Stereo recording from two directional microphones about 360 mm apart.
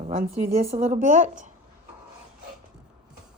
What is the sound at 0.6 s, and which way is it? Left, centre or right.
Speech, centre.